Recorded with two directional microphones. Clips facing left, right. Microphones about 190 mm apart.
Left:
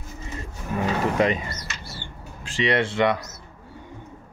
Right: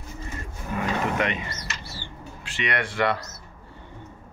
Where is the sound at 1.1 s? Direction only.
35° left (ahead or behind).